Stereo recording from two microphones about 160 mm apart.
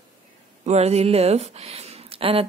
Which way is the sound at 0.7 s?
40° right (ahead or behind).